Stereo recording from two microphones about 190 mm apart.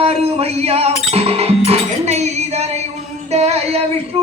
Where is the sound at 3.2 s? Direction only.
35° right (ahead or behind).